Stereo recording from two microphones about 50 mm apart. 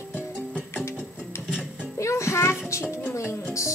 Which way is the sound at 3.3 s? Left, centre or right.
Left.